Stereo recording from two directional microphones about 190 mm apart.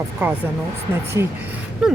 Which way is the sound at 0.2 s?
10° right (ahead or behind).